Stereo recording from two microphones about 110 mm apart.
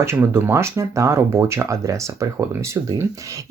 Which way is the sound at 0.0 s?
20° right (ahead or behind).